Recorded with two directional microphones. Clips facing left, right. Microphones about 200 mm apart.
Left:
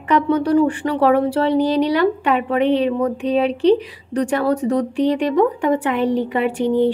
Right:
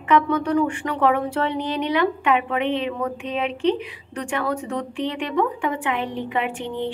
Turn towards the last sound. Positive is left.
turn(degrees=40)  # may be behind; listen again after turning